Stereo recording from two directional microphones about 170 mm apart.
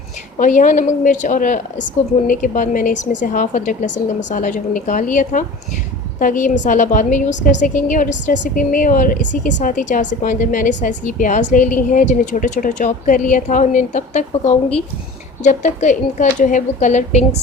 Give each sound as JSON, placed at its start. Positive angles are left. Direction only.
{"t": 0.3, "sound": "a woman's voice", "side_deg": 50}